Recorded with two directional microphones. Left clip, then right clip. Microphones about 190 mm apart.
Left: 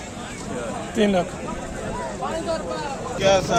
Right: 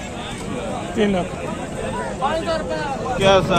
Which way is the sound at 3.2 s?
45° right (ahead or behind).